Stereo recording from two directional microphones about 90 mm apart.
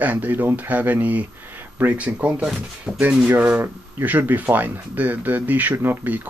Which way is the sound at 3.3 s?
20° right (ahead or behind).